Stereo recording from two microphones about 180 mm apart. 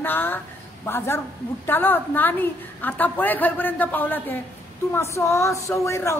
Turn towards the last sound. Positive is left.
turn(degrees=15)  # may be behind; listen again after turning